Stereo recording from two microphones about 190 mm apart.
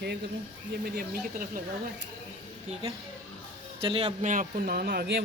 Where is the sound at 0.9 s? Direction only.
45° right (ahead or behind).